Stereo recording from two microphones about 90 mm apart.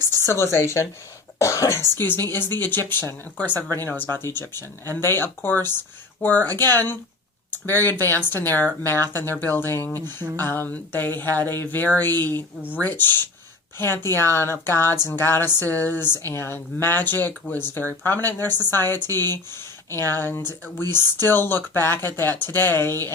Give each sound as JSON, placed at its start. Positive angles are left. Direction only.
{"t": 0.2, "sound": "speech", "side_deg": 30}